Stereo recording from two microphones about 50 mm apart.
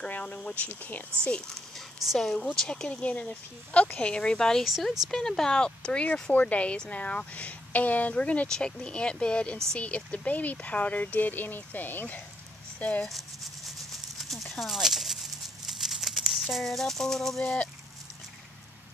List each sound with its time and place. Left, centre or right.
0.5 s speech: left
2.0 s speech: centre
2.3 s speech: centre
2.9 s a woman's voice: left
8.5 s a woman's voice: centre; by 12.2 s left
12.7 s speech: left
13.1 s a sound: centre